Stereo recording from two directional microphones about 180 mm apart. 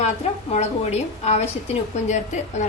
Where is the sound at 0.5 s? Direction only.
40° left (ahead or behind).